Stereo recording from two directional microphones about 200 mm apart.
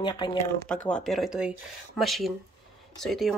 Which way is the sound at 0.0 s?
25° left (ahead or behind).